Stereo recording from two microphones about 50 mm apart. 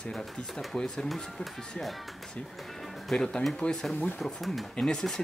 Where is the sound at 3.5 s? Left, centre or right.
Centre.